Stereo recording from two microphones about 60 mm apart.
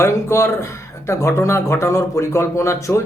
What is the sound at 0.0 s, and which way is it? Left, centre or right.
Speech, left.